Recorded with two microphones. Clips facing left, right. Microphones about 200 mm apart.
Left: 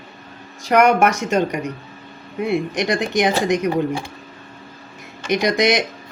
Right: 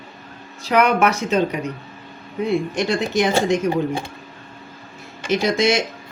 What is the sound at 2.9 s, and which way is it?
Speech, 15° left (ahead or behind).